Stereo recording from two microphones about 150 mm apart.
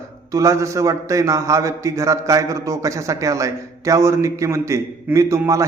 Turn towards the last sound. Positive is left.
turn(degrees=-20)  # may be behind; listen again after turning